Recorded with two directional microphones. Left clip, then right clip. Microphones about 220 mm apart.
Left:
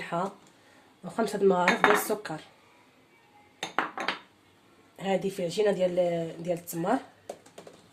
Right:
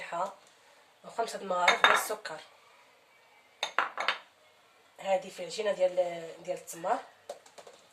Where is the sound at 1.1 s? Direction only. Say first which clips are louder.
Left 7 dB; 30° left (ahead or behind).